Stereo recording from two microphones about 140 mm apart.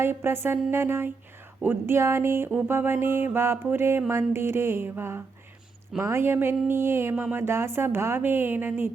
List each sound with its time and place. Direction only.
0.0 s speech: 15° right (ahead or behind)